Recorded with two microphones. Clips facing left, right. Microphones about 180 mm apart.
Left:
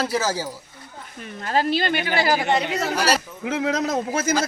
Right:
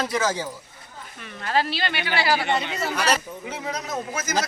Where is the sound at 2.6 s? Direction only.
80° left.